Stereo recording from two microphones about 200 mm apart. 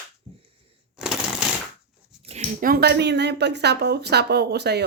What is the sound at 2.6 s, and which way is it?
Speech, 50° right (ahead or behind).